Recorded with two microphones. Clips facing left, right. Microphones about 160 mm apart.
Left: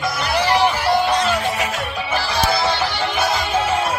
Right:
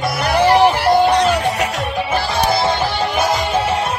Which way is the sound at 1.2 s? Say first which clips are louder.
Right 4 dB; 40° right (ahead or behind).